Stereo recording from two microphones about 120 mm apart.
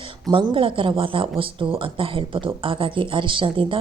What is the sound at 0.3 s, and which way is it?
Speech, 40° right (ahead or behind).